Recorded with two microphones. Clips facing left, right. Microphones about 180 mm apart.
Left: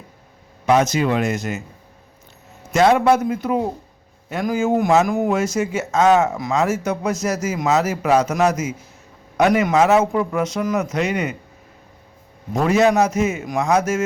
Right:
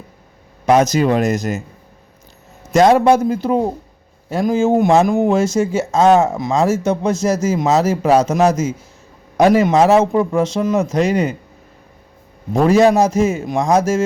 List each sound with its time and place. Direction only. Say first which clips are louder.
0.6 s a man's voice: right 4 dB; 40° right (ahead or behind)
2.7 s a man's voice: right 4 dB; 35° right (ahead or behind)
12.5 s a man's voice: right 4 dB; 30° right (ahead or behind)